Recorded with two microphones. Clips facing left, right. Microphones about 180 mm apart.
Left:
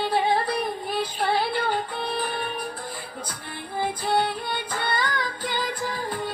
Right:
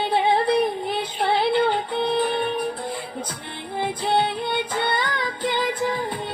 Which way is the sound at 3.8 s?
20° right (ahead or behind).